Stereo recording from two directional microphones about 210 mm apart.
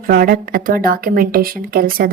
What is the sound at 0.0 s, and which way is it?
A woman's voice, 45° right (ahead or behind).